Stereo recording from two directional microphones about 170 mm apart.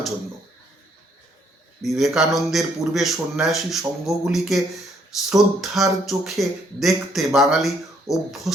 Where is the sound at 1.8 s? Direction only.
Centre (ahead or behind).